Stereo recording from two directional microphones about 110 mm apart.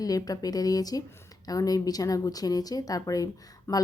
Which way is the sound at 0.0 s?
35° left (ahead or behind).